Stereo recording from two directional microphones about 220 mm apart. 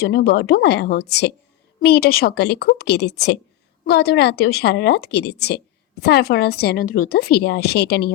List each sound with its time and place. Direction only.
0.0 s a woman's voice: 45° left (ahead or behind)